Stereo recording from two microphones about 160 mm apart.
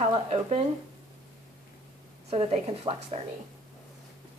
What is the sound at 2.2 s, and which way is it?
Speech, 40° right (ahead or behind).